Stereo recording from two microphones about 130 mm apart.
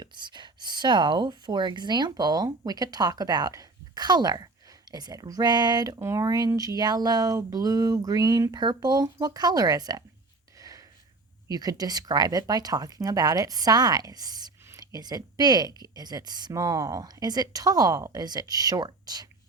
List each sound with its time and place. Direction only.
0.0 s speech: 35° right (ahead or behind)
10.6 s a sound: 30° right (ahead or behind)
11.4 s speech: 30° right (ahead or behind)